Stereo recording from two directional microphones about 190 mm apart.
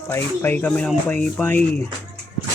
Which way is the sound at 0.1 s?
10° left (ahead or behind).